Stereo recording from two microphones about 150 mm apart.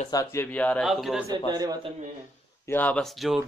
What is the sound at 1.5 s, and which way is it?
Speech, 25° right (ahead or behind).